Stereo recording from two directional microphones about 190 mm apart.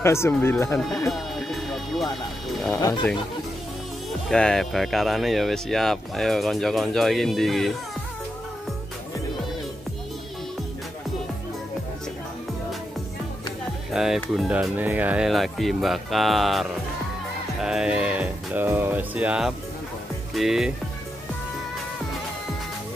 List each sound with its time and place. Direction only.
0.0 s speech: 15° left (ahead or behind)
0.7 s speech: centre (ahead or behind)
1.1 s music: centre (ahead or behind)
2.7 s speech: 15° left (ahead or behind)
4.3 s speech: 5° left (ahead or behind)
13.9 s speech: centre (ahead or behind)